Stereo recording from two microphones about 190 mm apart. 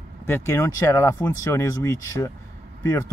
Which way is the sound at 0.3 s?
15° left (ahead or behind).